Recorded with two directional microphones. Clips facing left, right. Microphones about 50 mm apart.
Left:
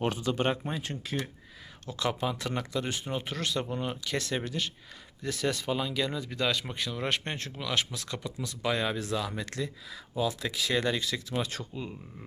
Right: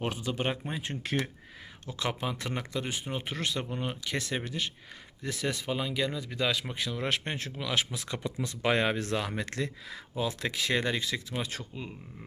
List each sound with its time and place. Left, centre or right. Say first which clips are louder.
0.0 s speech: left 3 dB; centre
1.0 s speech: right 5 dB; right
1.9 s speech: left 2 dB; right
10.2 s speech: left 1 dB; right
10.8 s speech: left 1 dB; right
11.3 s speech: left 3 dB; centre